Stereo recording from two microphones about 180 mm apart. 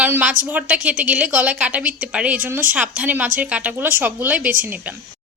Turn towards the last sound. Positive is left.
turn(degrees=-10)  # may be behind; listen again after turning